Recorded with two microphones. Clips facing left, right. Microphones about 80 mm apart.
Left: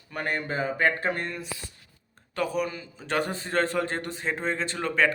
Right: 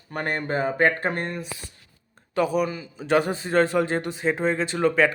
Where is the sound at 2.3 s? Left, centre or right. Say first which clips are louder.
Right 5 dB; centre.